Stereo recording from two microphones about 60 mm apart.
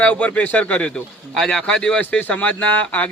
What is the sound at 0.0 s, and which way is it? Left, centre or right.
A man's voice, left.